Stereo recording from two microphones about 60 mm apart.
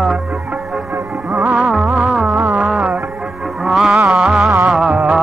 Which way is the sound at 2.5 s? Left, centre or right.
Centre.